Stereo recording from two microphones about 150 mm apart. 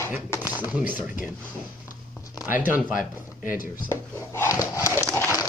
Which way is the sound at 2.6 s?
10° right (ahead or behind).